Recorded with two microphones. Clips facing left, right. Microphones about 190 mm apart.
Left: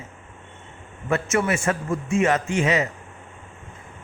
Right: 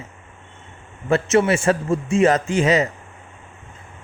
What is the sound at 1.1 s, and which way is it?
A man's voice, 30° right (ahead or behind).